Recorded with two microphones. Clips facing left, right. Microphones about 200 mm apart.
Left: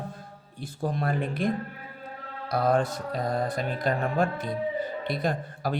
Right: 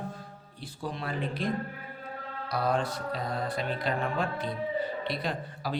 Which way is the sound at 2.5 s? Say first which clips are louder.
Left 5 dB; 50° left (ahead or behind).